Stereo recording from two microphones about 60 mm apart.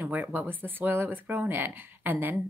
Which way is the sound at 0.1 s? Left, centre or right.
Right.